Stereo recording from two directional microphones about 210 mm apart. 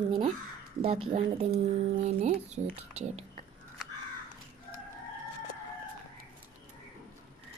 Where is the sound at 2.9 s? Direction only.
30° right (ahead or behind).